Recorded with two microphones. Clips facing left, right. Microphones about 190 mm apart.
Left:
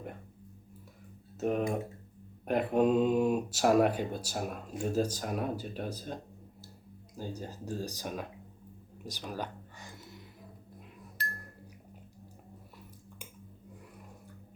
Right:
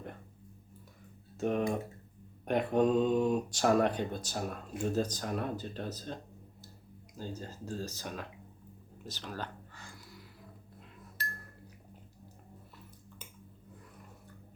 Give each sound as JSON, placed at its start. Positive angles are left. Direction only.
{"t": 1.4, "sound": "speech", "side_deg": 5}
{"t": 7.2, "sound": "speech", "side_deg": 15}
{"t": 9.0, "sound": "music", "side_deg": 15}